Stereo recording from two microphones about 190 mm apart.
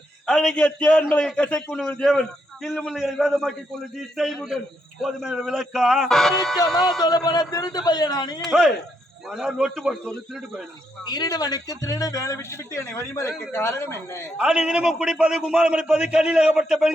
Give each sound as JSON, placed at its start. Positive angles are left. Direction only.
{"t": 0.3, "sound": "a man's voice", "side_deg": 5}
{"t": 7.0, "sound": "a man's voice", "side_deg": 20}
{"t": 9.3, "sound": "a man's voice", "side_deg": 0}
{"t": 11.0, "sound": "a man's voice", "side_deg": 20}
{"t": 14.3, "sound": "a man's voice", "side_deg": -5}